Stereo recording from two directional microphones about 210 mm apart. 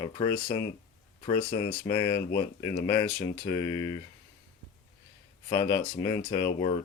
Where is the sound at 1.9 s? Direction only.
20° left (ahead or behind).